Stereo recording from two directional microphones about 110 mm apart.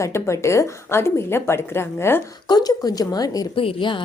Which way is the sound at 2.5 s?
35° left (ahead or behind).